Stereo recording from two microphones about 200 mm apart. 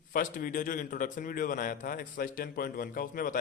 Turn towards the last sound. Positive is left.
turn(degrees=45)  # may be behind; listen again after turning